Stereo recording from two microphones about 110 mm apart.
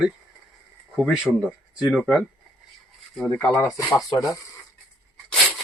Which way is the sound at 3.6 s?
30° left (ahead or behind).